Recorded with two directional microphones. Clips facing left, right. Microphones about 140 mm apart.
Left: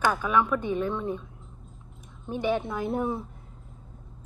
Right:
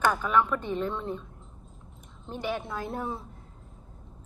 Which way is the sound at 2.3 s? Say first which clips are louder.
Left 5 dB; 20° left (ahead or behind).